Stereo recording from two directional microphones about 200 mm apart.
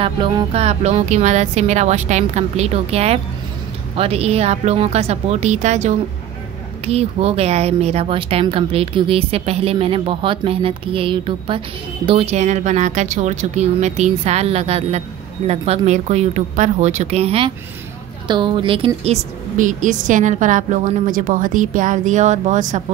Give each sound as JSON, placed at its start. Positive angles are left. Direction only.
{"t": 0.0, "sound": "speech", "side_deg": -20}
{"t": 19.5, "sound": "speech", "side_deg": -40}